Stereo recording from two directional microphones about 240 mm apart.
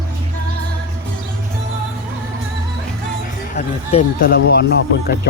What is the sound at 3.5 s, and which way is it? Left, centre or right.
Speech, left.